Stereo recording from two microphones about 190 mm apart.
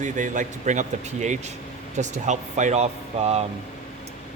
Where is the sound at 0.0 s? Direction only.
40° right (ahead or behind).